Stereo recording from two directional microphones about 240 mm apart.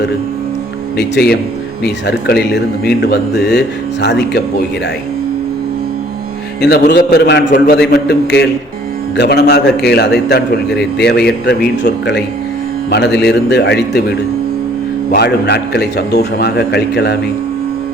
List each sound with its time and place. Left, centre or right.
0.9 s a man's voice: left
6.6 s a man's voice: left
15.1 s a man's voice: left